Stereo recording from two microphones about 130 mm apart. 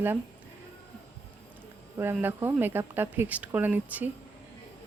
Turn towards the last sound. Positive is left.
turn(degrees=-10)  # may be behind; listen again after turning